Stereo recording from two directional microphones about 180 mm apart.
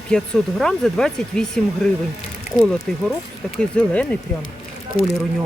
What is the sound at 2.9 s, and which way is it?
Speech, 5° left (ahead or behind).